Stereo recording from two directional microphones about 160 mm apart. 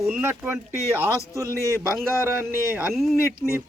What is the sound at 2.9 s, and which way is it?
Speech, centre (ahead or behind).